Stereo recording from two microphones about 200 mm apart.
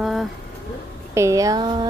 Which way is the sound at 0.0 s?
Centre (ahead or behind).